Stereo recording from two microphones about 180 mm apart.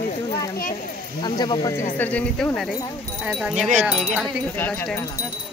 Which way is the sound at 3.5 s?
40° right (ahead or behind).